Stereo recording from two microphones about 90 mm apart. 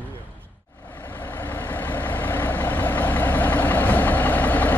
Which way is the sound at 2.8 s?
20° left (ahead or behind).